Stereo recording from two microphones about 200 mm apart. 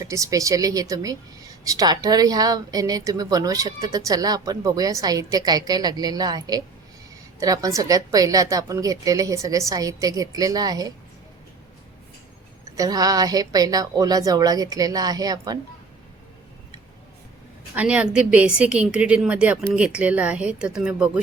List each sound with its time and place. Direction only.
0.0 s a woman's voice: 15° right (ahead or behind)
12.7 s a woman's voice: 20° right (ahead or behind)
17.7 s a woman's voice: 5° right (ahead or behind)